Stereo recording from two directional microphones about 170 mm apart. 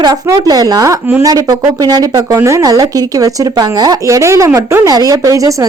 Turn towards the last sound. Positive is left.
turn(degrees=-20)  # may be behind; listen again after turning